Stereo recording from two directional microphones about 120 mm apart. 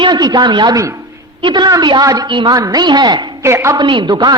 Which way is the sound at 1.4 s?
40° right (ahead or behind).